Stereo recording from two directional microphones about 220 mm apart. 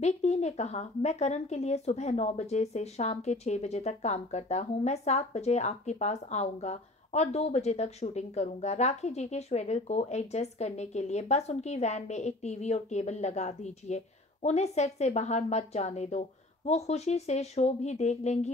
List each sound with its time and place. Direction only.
0.0 s speech: 30° left (ahead or behind)